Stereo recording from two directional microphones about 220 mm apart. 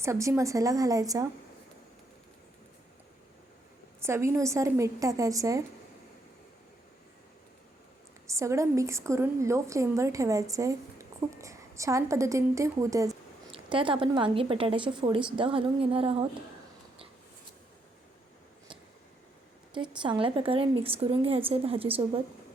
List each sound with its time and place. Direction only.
0.0 s a woman's voice: 15° right (ahead or behind)
4.0 s a woman's voice: 10° right (ahead or behind)
8.3 s a woman's voice: 15° right (ahead or behind)
19.7 s a woman's voice: 20° right (ahead or behind)